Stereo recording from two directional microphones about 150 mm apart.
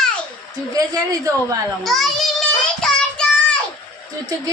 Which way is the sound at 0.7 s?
25° right (ahead or behind).